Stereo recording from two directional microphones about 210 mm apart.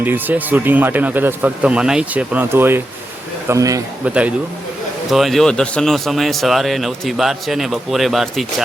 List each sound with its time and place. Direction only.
0.0 s speech: 10° right (ahead or behind)